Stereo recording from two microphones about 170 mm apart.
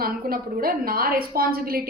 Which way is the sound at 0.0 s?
60° right (ahead or behind).